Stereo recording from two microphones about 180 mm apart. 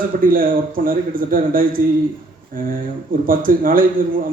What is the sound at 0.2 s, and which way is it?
A man's voice, 50° right (ahead or behind).